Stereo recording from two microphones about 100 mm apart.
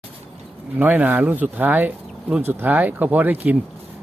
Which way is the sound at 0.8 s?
15° right (ahead or behind).